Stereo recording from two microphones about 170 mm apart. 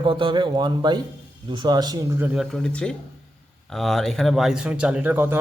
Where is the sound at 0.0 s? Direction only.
30° right (ahead or behind); by 2.4 s 15° right (ahead or behind).